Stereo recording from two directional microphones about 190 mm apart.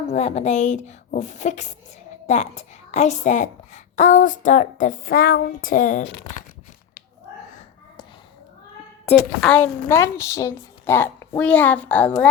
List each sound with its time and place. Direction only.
0.1 s a woman's voice: 35° left (ahead or behind)
9.0 s a woman's voice: 5° left (ahead or behind)